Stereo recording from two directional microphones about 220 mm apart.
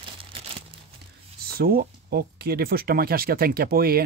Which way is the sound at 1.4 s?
45° right (ahead or behind).